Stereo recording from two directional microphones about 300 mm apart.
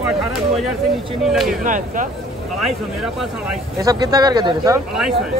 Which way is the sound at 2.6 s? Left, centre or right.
Centre.